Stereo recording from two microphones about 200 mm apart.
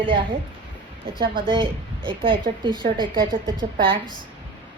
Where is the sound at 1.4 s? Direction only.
25° right (ahead or behind).